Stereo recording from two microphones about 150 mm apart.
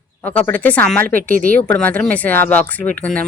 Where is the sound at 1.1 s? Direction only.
70° right (ahead or behind).